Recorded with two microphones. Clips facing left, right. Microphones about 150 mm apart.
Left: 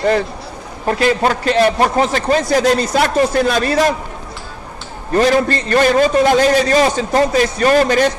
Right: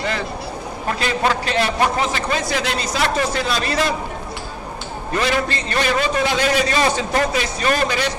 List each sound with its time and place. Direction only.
0.9 s a man's voice: 45° left (ahead or behind)
5.1 s a man's voice: 40° left (ahead or behind)